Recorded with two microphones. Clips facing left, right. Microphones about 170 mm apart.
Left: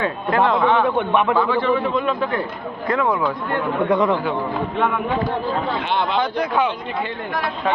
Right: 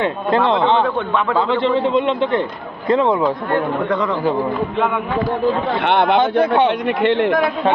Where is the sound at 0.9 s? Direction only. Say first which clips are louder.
Left 1 dB; 20° left (ahead or behind).